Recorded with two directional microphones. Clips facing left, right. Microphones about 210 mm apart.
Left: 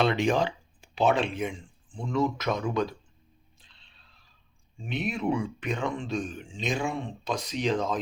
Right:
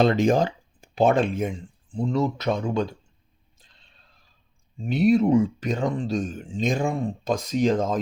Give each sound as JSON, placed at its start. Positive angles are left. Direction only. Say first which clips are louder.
{"t": 0.0, "sound": "speech", "louder": "right 5 dB", "side_deg": -40}
{"t": 3.6, "sound": "music", "louder": "right 2 dB", "side_deg": -45}
{"t": 4.8, "sound": "speech", "louder": "right 12 dB", "side_deg": -40}